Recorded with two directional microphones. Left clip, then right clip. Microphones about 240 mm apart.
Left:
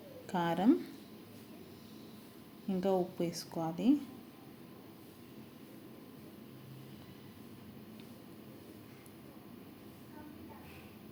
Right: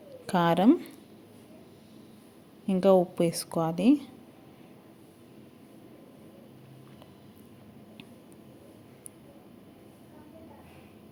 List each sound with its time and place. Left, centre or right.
0.3 s a woman's voice: right
2.6 s a woman's voice: right